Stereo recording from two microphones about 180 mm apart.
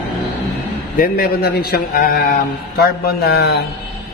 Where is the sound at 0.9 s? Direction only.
55° left (ahead or behind).